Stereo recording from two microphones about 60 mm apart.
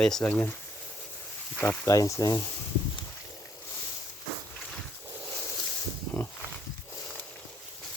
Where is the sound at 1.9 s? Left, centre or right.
Left.